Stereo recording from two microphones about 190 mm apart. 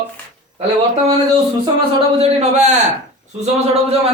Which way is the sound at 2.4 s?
35° right (ahead or behind).